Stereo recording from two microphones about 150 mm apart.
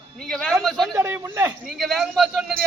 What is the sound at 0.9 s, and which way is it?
Speech, 15° right (ahead or behind).